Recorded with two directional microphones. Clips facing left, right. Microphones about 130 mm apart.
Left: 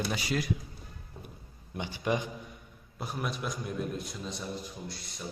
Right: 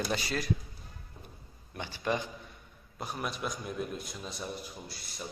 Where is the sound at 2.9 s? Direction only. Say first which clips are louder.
Left 1 dB; centre (ahead or behind).